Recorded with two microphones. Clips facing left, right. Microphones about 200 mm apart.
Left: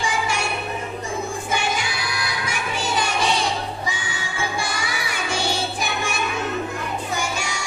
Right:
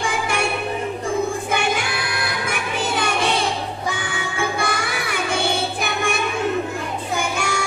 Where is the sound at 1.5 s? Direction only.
55° right (ahead or behind).